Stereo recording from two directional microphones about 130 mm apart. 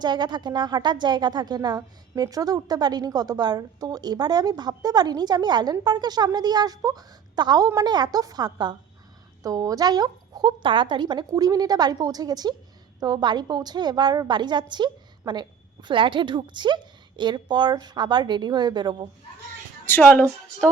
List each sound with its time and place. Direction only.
0.0 s a woman's voice: 35° right (ahead or behind)
19.8 s speech: 15° left (ahead or behind)